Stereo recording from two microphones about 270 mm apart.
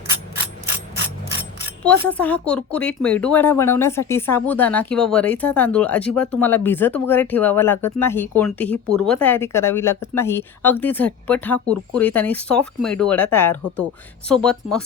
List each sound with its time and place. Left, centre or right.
1.8 s speech: centre